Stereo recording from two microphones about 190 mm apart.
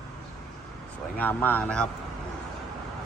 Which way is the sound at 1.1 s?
10° left (ahead or behind).